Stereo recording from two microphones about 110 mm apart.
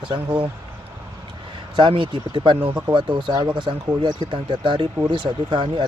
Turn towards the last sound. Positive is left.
turn(degrees=-50)  # may be behind; listen again after turning